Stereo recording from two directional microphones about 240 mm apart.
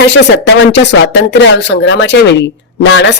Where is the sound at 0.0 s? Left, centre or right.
Left.